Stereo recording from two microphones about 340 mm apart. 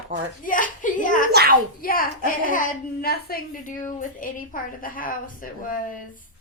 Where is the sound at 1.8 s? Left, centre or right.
Left.